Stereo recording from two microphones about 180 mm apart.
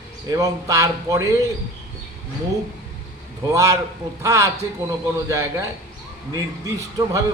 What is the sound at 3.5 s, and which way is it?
A man's voice, 15° right (ahead or behind).